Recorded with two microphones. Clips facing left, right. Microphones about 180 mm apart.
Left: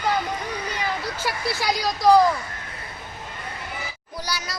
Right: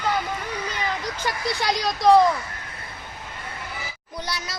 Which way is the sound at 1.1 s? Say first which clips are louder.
Even; 5° left (ahead or behind).